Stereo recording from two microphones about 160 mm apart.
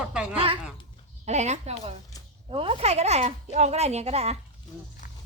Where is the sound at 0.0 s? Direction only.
5° right (ahead or behind).